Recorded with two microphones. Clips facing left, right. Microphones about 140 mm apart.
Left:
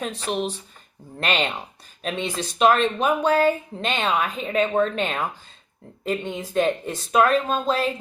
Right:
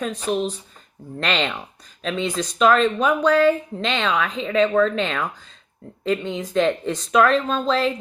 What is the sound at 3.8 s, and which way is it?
Speech, 90° right.